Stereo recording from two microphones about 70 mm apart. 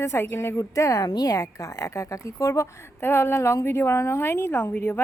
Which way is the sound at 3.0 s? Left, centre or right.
Left.